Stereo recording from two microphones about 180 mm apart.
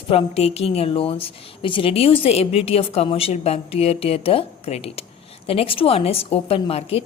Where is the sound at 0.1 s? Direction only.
35° left (ahead or behind).